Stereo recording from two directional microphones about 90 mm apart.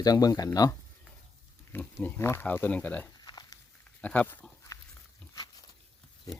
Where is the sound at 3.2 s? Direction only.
50° left (ahead or behind).